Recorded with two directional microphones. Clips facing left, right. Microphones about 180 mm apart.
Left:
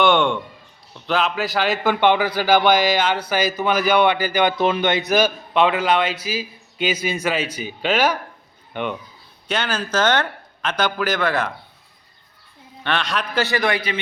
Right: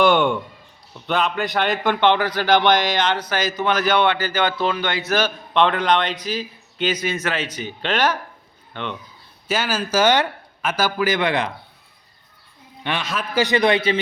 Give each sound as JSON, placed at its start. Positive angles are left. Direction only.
{"t": 0.0, "sound": "a man's voice", "side_deg": -5}
{"t": 9.5, "sound": "a man's voice", "side_deg": -5}
{"t": 12.8, "sound": "a man's voice", "side_deg": -10}
{"t": 13.4, "sound": "a man's voice", "side_deg": -20}